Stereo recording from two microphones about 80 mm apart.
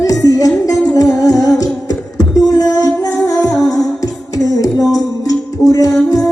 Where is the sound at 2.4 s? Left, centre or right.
Left.